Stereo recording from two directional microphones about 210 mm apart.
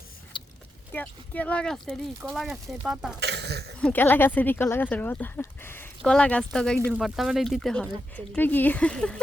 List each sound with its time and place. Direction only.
0.3 s vehicle: 20° left (ahead or behind)
0.9 s speech: 5° left (ahead or behind)
3.2 s speech: 55° right (ahead or behind)
3.8 s speech: 5° left (ahead or behind)